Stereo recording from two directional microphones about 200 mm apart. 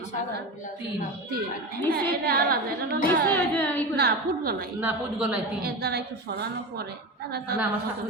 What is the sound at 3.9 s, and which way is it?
Speech, 50° right (ahead or behind).